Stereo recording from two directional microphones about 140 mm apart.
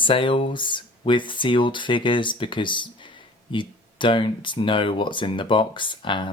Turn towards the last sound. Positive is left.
turn(degrees=35)  # may be behind; listen again after turning